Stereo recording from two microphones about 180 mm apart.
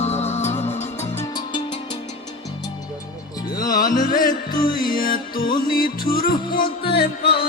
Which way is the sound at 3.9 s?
50° left (ahead or behind).